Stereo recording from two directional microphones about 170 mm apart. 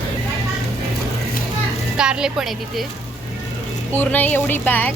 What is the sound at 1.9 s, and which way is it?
Speech, 5° right (ahead or behind).